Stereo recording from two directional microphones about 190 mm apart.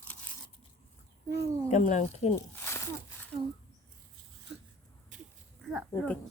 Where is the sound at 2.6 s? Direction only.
10° left (ahead or behind).